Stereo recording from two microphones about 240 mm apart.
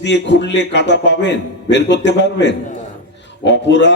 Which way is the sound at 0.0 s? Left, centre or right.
Left.